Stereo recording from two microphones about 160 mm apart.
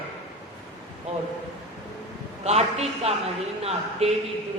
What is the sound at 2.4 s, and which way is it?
A man's voice, 40° right (ahead or behind).